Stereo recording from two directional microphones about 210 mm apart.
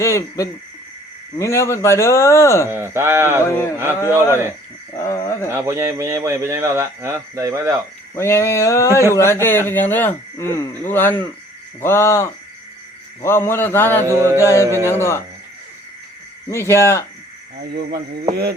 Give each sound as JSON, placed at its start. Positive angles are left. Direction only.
{"t": 0.0, "sound": "speech", "side_deg": 15}
{"t": 2.6, "sound": "speech", "side_deg": -10}
{"t": 4.9, "sound": "speech", "side_deg": 15}
{"t": 5.5, "sound": "speech", "side_deg": -15}
{"t": 8.1, "sound": "speech", "side_deg": 10}
{"t": 14.2, "sound": "speech", "side_deg": -15}
{"t": 14.4, "sound": "speech", "side_deg": 15}
{"t": 16.5, "sound": "speech", "side_deg": 10}
{"t": 17.7, "sound": "speech", "side_deg": -50}